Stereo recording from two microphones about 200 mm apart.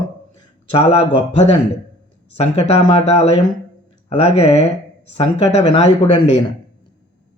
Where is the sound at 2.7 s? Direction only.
30° left (ahead or behind).